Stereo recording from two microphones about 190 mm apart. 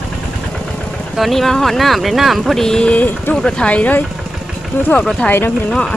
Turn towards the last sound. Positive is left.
turn(degrees=5)  # may be behind; listen again after turning